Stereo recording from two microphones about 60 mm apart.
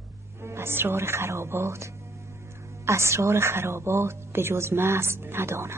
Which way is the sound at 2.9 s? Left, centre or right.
Right.